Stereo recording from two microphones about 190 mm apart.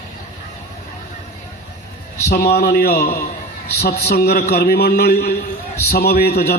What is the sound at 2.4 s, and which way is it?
A man's voice, 60° left (ahead or behind).